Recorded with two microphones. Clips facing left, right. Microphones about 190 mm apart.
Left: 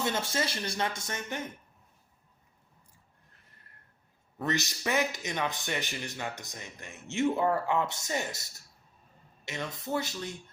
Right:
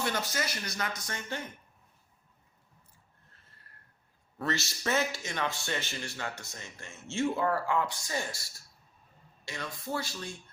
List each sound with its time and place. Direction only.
0.0 s speech: 25° left (ahead or behind)
3.3 s a sound: 15° left (ahead or behind)
4.4 s speech: 15° left (ahead or behind)